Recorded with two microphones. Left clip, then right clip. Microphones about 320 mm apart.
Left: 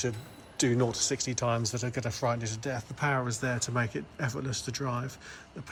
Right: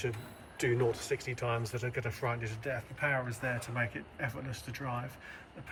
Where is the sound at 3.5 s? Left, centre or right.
Left.